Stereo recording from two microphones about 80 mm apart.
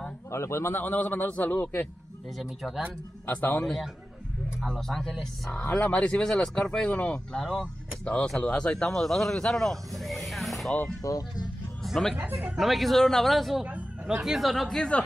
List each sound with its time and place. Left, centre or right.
0.3 s a man's voice: left
2.3 s speech: centre
3.3 s a man's voice: left
3.6 s speech: centre
11.0 s speech: left
11.8 s speech: centre
12.2 s speech: right
12.5 s speech: centre
13.7 s speech: centre